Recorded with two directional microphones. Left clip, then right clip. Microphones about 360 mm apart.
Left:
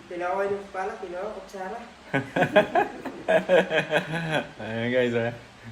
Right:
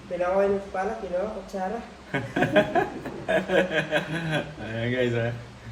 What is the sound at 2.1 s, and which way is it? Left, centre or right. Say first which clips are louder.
Speech: left 1 dB; left.